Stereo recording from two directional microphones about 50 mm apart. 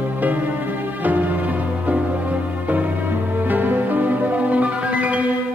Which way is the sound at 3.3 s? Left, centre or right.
Right.